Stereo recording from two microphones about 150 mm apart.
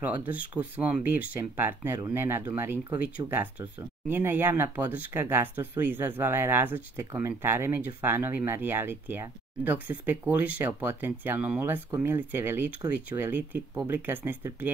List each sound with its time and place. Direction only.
0.0 s speech: 10° right (ahead or behind)